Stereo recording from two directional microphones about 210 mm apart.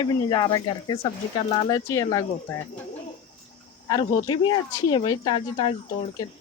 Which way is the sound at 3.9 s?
20° left (ahead or behind).